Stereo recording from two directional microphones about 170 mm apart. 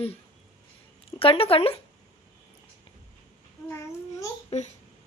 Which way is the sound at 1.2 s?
35° left (ahead or behind).